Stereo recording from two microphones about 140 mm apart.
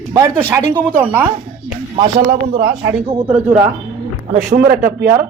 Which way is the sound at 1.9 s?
35° right (ahead or behind).